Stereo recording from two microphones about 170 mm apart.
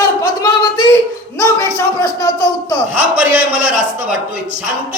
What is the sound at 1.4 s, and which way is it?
Speech, 15° left (ahead or behind).